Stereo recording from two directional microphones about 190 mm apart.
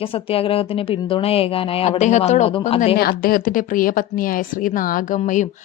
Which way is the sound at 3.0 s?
50° left (ahead or behind).